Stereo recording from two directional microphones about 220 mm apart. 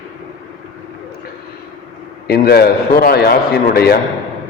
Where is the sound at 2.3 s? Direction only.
45° left (ahead or behind).